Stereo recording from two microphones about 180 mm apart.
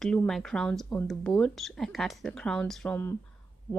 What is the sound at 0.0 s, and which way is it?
A woman's voice, 5° left (ahead or behind).